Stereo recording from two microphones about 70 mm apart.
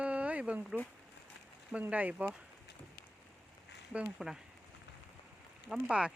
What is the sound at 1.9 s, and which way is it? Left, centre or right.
Speech, right.